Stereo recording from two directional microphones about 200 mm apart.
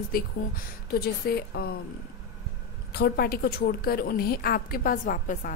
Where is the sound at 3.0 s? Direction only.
50° left (ahead or behind).